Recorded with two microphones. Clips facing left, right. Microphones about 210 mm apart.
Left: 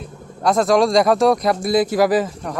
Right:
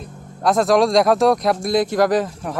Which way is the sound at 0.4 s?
Centre (ahead or behind).